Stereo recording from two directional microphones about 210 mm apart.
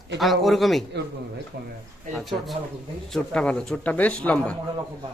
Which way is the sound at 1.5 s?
45° right (ahead or behind).